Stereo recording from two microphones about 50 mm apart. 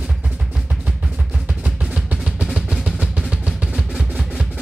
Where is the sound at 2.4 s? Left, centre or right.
Centre.